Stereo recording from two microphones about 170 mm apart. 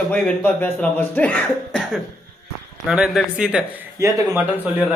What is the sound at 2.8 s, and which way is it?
Speech, 5° right (ahead or behind).